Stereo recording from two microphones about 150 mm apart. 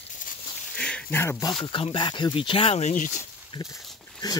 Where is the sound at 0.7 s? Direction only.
5° left (ahead or behind).